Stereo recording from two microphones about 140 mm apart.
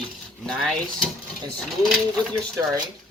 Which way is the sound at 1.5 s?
5° left (ahead or behind).